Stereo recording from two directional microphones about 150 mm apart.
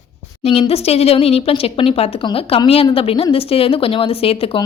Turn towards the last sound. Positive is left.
turn(degrees=40)  # may be behind; listen again after turning